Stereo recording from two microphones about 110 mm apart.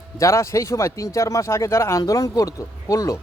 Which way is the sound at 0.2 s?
25° left (ahead or behind).